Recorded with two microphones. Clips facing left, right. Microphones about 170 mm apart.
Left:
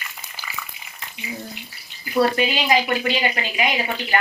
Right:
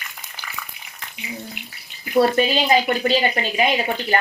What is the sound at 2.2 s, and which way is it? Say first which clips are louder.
Speech: right 3 dB; 35° right (ahead or behind).